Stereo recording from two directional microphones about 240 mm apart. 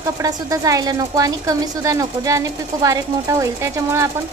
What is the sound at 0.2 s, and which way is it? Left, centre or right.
Speech, centre.